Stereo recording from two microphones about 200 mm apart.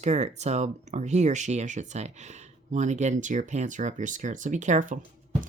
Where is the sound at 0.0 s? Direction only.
35° right (ahead or behind).